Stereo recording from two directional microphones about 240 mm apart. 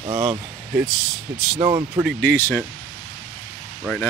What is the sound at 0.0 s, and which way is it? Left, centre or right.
Speech, centre.